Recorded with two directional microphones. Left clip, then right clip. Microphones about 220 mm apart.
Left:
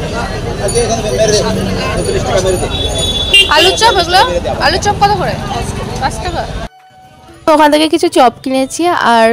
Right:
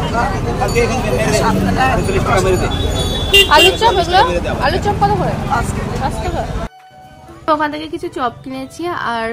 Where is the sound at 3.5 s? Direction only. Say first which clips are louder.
Left 2 dB; centre (ahead or behind).